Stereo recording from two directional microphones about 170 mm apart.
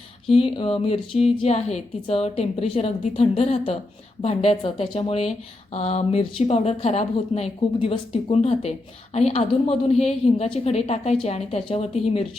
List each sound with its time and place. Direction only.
0.3 s a woman's voice: 35° left (ahead or behind)